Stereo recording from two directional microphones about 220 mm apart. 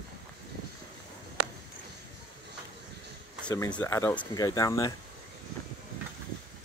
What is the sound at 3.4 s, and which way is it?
Speech, 20° left (ahead or behind).